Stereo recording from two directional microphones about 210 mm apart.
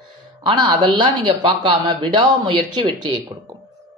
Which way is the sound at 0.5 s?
20° right (ahead or behind).